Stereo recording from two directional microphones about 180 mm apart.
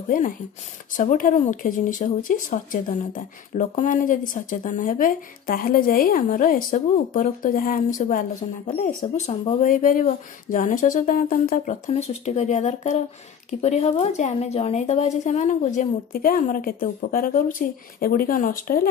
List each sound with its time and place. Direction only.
0.1 s a woman's voice: 50° left (ahead or behind)
8.6 s a woman's voice: 35° left (ahead or behind); by 18.9 s 50° left (ahead or behind)